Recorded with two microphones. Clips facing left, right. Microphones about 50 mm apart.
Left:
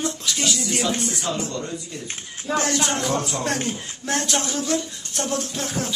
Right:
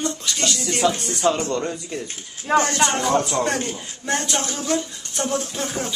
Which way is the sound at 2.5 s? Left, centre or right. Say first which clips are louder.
Right 6 dB; right.